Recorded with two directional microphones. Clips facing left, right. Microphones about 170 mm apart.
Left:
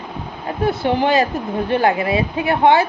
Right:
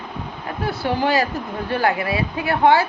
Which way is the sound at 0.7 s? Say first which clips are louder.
Left 3 dB; 20° left (ahead or behind).